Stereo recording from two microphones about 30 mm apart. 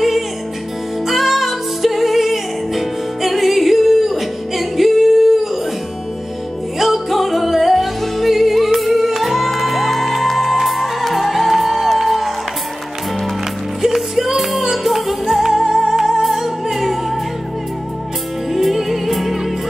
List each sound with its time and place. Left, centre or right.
1.0 s music: centre
6.8 s music: centre
13.9 s music: centre
18.5 s music: centre